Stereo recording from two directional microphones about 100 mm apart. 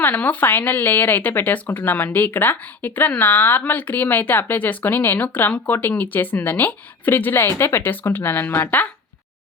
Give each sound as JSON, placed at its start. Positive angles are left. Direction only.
{"t": 0.0, "sound": "a woman's voice", "side_deg": 15}